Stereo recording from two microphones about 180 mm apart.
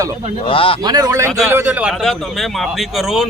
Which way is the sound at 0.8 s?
20° right (ahead or behind).